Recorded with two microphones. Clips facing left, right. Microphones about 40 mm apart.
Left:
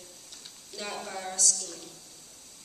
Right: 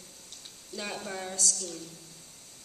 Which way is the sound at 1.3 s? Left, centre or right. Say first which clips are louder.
Even; right.